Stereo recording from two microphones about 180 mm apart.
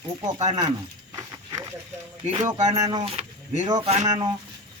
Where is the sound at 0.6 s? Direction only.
20° right (ahead or behind).